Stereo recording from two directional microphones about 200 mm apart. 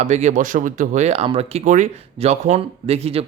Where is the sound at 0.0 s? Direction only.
35° right (ahead or behind).